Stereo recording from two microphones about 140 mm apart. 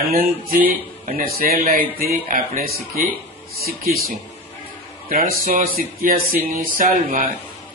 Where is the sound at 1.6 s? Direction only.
90° right.